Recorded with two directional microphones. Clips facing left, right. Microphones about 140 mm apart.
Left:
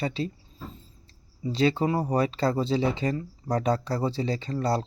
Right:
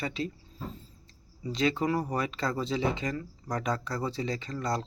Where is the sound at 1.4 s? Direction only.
30° left (ahead or behind).